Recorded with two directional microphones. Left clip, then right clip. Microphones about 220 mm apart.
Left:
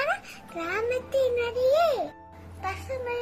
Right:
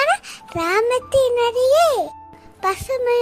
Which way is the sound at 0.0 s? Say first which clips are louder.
Right 10 dB; 50° right (ahead or behind).